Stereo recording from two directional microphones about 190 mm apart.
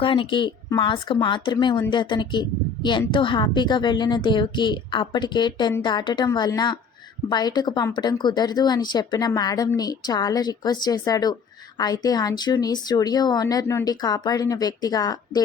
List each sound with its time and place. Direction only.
0.0 s a woman's voice: 25° left (ahead or behind)